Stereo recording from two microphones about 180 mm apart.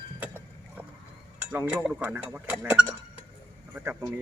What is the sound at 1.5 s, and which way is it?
Speech, 5° right (ahead or behind).